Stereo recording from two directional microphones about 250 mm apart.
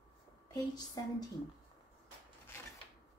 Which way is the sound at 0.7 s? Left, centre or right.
Centre.